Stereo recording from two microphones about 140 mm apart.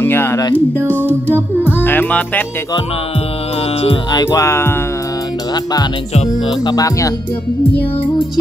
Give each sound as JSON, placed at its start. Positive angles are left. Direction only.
{"t": 0.0, "sound": "music", "side_deg": 15}
{"t": 3.8, "sound": "music", "side_deg": 35}
{"t": 4.3, "sound": "music", "side_deg": 20}